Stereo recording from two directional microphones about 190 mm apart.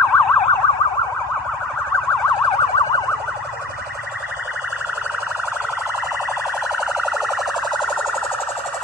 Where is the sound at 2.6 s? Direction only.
20° left (ahead or behind).